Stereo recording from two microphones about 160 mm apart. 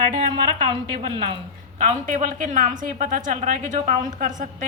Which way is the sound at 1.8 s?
55° right (ahead or behind).